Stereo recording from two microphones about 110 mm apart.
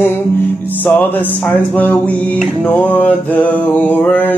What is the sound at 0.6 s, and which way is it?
Music, 15° left (ahead or behind).